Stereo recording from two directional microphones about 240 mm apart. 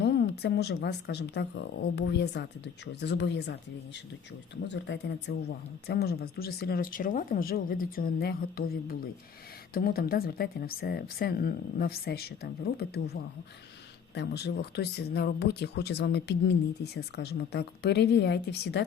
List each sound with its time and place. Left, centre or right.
0.0 s speech: left
14.1 s speech: left